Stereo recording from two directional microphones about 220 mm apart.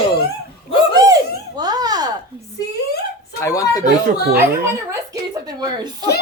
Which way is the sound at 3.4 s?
15° left (ahead or behind).